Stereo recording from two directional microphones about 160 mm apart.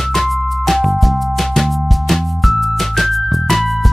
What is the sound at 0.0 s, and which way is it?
Music, centre (ahead or behind).